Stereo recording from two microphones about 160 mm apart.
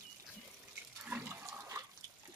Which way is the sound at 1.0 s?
10° right (ahead or behind).